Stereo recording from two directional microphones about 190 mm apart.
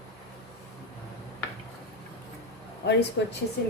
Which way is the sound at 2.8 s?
55° left (ahead or behind).